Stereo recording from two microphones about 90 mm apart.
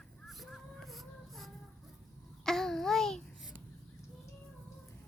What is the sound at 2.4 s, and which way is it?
Babbling, 5° left (ahead or behind).